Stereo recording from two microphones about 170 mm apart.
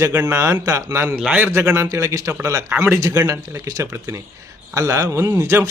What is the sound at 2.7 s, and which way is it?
Speech, 5° right (ahead or behind).